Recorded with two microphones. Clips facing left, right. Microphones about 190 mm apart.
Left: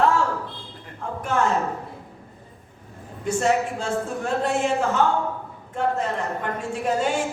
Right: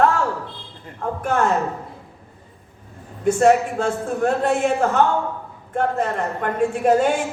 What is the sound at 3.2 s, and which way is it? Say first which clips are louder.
A woman's voice: right 6 dB; 55° right (ahead or behind).